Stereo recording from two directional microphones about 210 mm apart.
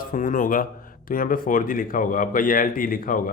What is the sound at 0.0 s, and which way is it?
Speech, 40° left (ahead or behind).